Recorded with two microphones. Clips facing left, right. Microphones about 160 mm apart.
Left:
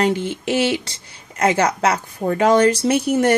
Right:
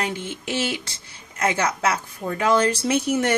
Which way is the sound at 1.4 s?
40° left (ahead or behind).